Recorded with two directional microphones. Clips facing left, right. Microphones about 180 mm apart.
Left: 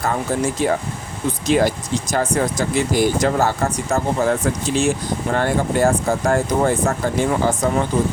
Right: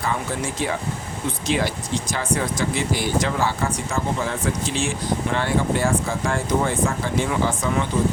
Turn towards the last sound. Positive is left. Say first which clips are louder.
# left 4 dB
turn(degrees=40)  # may be behind; listen again after turning